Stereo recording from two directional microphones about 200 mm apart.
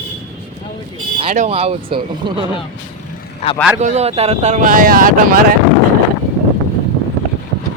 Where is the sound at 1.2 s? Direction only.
35° right (ahead or behind).